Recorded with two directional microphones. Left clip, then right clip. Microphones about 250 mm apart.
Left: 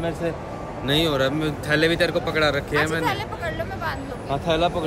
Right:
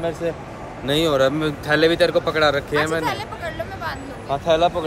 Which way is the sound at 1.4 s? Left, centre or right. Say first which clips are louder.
Right 3 dB; centre.